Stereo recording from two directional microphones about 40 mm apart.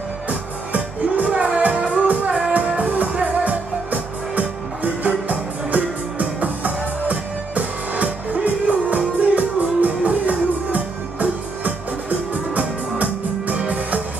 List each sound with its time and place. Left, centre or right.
0.3 s music: right
2.8 s music: right